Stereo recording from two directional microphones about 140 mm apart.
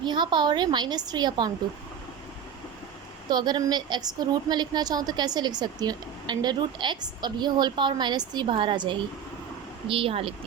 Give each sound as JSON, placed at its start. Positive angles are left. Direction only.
{"t": 0.0, "sound": "a woman's voice", "side_deg": -30}
{"t": 3.2, "sound": "a woman's voice", "side_deg": -30}